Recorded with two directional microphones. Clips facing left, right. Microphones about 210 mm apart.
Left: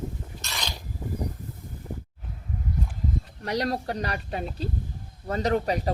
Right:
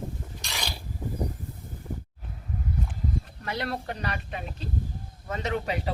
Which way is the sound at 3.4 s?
40° left (ahead or behind).